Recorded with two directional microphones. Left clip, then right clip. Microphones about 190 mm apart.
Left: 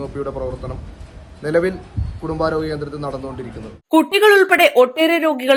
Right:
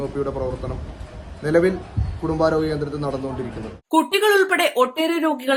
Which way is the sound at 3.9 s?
25° left (ahead or behind).